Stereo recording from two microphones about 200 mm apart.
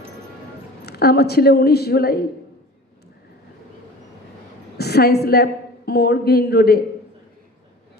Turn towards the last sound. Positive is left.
turn(degrees=50)  # may be behind; listen again after turning